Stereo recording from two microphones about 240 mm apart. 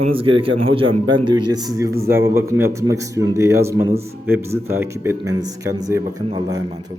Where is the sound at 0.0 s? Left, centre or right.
Right.